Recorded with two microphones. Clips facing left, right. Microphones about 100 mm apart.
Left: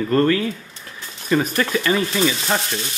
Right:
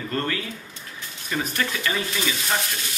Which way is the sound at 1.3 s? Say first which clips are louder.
Left 7 dB; 50° left (ahead or behind).